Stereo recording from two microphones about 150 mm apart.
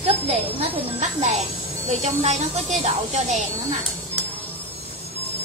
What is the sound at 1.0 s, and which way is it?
A child's voice, 50° right (ahead or behind).